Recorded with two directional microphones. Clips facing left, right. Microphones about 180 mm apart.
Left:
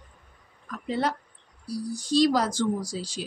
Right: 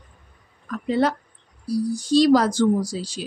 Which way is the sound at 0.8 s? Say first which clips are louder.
Right 6 dB; 75° right (ahead or behind).